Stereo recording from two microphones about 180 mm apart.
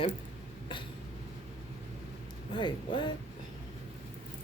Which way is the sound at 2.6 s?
25° left (ahead or behind).